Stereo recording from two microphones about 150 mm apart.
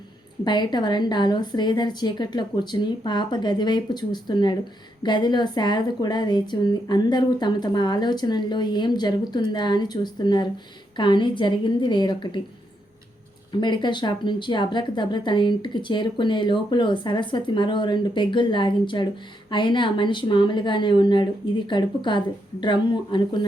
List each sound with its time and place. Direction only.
0.4 s a woman's voice: 30° left (ahead or behind)
13.5 s speech: 30° left (ahead or behind)